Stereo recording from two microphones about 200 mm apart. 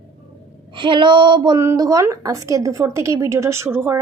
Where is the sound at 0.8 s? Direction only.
25° right (ahead or behind).